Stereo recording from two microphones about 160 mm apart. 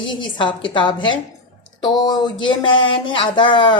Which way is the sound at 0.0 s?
30° left (ahead or behind).